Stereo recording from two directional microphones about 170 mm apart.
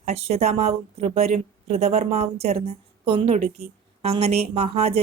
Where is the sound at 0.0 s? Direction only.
35° right (ahead or behind).